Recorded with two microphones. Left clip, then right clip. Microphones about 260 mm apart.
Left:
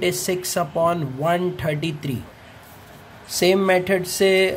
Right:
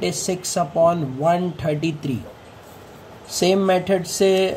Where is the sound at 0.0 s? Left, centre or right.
Left.